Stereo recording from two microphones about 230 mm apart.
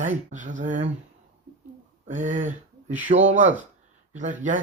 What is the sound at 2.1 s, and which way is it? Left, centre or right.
Speech, right.